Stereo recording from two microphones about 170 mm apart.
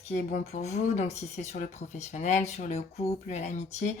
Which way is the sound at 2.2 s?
45° left (ahead or behind).